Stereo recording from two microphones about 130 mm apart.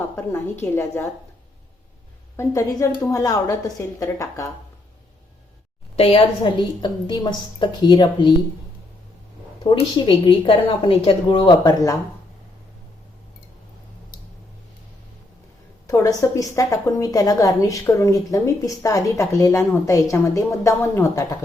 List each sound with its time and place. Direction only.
0.2 s a woman's voice: 15° left (ahead or behind)
2.3 s a woman's voice: 20° left (ahead or behind)
6.0 s a woman's voice: 45° left (ahead or behind)
9.9 s a woman's voice: 45° left (ahead or behind)
15.9 s a woman's voice: 25° left (ahead or behind)